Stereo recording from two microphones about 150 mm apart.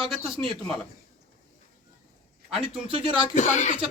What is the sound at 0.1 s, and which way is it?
Speech, centre (ahead or behind).